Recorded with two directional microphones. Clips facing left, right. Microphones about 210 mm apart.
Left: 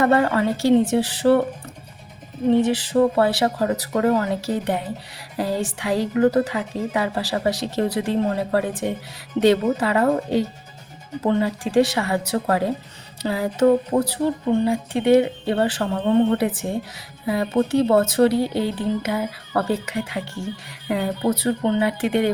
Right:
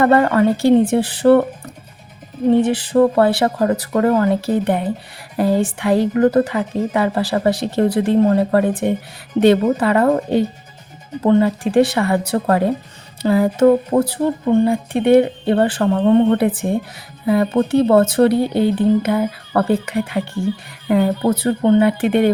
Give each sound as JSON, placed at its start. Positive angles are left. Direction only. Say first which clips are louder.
{"t": 0.0, "sound": "a woman's voice", "louder": "right 5 dB", "side_deg": -55}
{"t": 2.6, "sound": "a woman's voice", "louder": "right 4 dB", "side_deg": -55}